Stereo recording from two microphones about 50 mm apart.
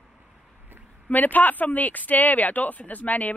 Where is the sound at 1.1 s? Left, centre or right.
Left.